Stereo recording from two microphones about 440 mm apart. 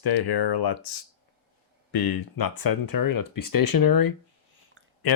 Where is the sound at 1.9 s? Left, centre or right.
Left.